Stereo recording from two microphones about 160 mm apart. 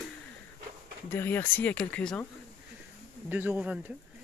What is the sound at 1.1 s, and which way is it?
Speech, 15° left (ahead or behind).